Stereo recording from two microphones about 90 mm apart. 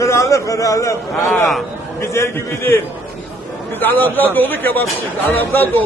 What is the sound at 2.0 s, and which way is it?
Speech, 30° left (ahead or behind).